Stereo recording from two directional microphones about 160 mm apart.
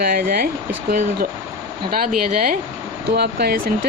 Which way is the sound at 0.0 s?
65° right (ahead or behind).